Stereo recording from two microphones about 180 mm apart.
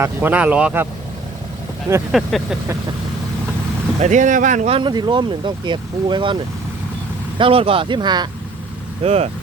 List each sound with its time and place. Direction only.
0.0 s speech: 10° right (ahead or behind)
2.1 s vehicle: centre (ahead or behind)
4.0 s speech: 45° right (ahead or behind); by 8.3 s 25° right (ahead or behind)
9.0 s speech: 35° right (ahead or behind)